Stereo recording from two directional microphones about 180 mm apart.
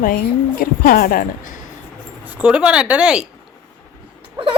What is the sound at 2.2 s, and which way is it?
Speech, 10° right (ahead or behind).